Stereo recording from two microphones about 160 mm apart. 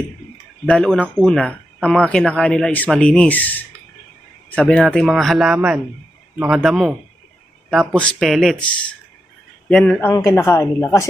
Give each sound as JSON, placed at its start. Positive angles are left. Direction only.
{"t": 0.6, "sound": "a man's voice", "side_deg": 0}